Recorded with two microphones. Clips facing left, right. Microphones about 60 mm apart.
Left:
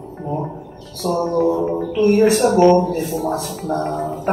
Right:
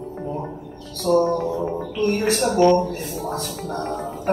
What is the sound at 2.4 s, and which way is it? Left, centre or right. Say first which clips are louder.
Speech: left 2 dB; left.